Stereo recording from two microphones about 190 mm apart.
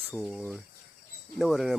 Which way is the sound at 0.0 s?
Centre (ahead or behind).